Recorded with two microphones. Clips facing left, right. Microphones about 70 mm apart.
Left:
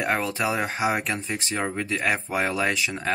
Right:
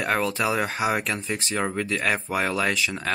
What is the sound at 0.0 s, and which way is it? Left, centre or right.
Speech, centre.